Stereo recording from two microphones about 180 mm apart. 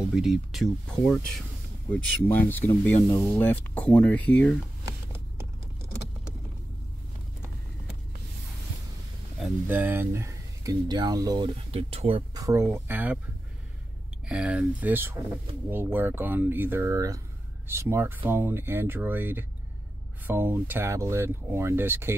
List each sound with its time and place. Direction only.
0.1 s speech: centre (ahead or behind)
1.9 s speech: 10° left (ahead or behind)
9.4 s speech: 10° right (ahead or behind); by 12.2 s 35° right (ahead or behind)
12.4 s speech: 15° right (ahead or behind)
14.2 s speech: 5° right (ahead or behind)